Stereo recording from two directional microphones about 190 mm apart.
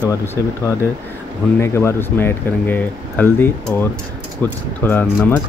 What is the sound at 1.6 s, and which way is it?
Speech, 15° left (ahead or behind).